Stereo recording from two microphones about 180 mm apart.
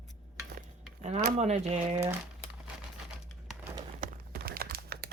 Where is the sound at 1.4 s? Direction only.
40° right (ahead or behind).